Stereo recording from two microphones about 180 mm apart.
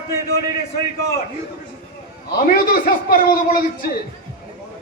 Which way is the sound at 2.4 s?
55° left (ahead or behind).